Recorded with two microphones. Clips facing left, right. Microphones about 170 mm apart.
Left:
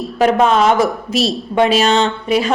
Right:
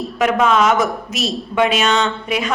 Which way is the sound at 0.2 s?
35° left (ahead or behind).